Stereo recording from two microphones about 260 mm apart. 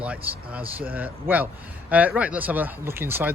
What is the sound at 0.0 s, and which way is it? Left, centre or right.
Speech, centre.